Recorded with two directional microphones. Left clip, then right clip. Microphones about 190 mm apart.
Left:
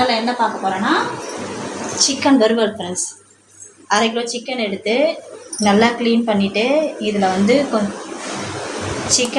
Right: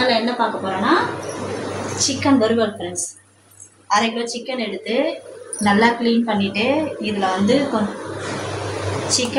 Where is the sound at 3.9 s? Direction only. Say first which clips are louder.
Left 1 dB; 45° left (ahead or behind).